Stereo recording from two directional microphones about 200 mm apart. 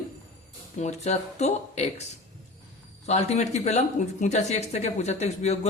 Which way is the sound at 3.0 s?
35° left (ahead or behind).